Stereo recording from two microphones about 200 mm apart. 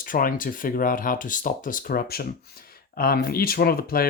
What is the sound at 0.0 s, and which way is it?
Speech, 45° left (ahead or behind).